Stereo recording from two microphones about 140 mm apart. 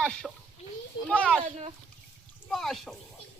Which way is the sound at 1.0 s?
10° left (ahead or behind).